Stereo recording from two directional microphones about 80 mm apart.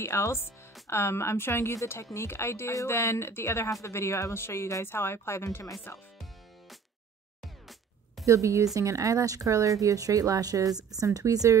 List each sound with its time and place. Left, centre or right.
0.0 s a woman's voice: left
8.3 s speech: right